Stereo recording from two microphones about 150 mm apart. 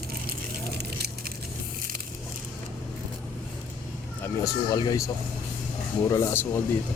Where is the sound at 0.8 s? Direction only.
90° right.